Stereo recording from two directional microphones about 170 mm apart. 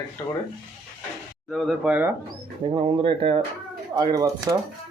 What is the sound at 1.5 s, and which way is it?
Speech, 5° right (ahead or behind).